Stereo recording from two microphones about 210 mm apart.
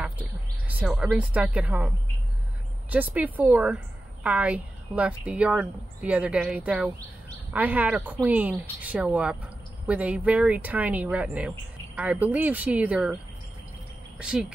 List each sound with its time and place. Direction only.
0.0 s speech: 5° right (ahead or behind)
2.9 s a woman's voice: 5° right (ahead or behind)